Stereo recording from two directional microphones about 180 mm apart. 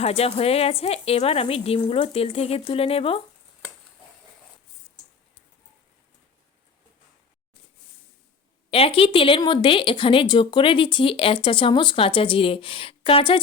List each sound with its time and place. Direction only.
0.0 s speech: 35° left (ahead or behind)
8.7 s speech: 30° left (ahead or behind)